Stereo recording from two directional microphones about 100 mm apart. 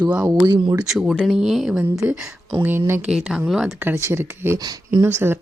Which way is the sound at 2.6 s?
25° right (ahead or behind).